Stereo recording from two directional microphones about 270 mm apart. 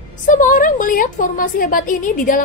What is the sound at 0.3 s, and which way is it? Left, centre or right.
A woman's voice, left.